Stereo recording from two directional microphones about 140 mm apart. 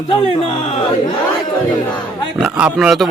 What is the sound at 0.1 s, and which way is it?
Speech, 40° left (ahead or behind).